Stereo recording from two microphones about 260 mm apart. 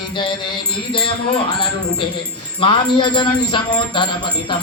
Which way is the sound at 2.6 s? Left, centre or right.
Centre.